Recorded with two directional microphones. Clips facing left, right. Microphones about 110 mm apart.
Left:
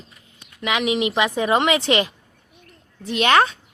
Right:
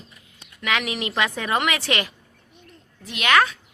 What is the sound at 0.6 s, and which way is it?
A woman's voice, 20° left (ahead or behind).